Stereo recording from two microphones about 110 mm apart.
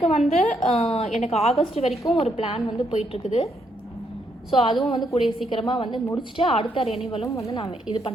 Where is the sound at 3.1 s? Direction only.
70° left (ahead or behind).